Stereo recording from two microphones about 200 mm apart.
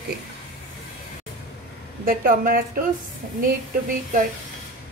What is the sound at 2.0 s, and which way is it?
Speech, 45° right (ahead or behind).